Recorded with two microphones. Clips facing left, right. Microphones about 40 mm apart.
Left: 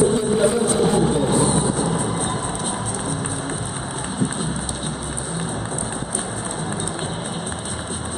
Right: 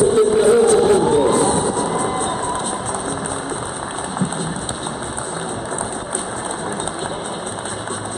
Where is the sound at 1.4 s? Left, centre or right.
Centre.